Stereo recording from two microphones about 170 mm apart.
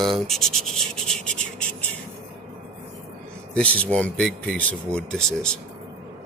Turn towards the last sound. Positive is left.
turn(degrees=5)  # may be behind; listen again after turning